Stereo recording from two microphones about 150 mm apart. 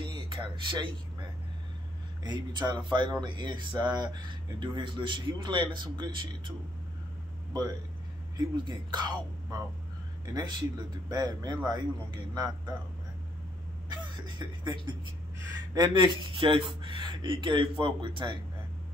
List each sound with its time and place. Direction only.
0.0 s a sound: 30° right (ahead or behind)
2.2 s speech: 30° right (ahead or behind)
8.4 s speech: 30° right (ahead or behind)
13.8 s speech: 30° right (ahead or behind)
15.7 s speech: 30° right (ahead or behind)